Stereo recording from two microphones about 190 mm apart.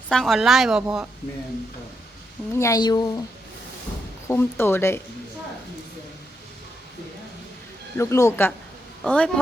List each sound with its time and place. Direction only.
0.1 s a woman's voice: centre (ahead or behind)
2.5 s a woman's voice: 15° left (ahead or behind)
4.3 s speech: 10° left (ahead or behind)
7.9 s a woman's voice: 15° left (ahead or behind)